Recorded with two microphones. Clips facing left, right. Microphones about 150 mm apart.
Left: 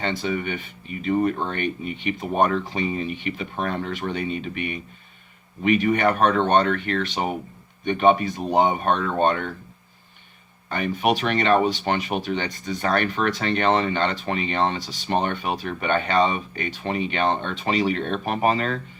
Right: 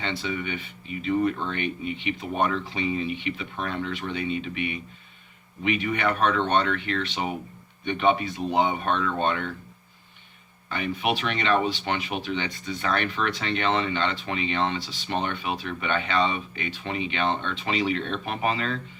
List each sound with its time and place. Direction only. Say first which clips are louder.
0.0 s speech: left 4 dB; 45° left (ahead or behind)
10.7 s speech: left 4 dB; 45° left (ahead or behind)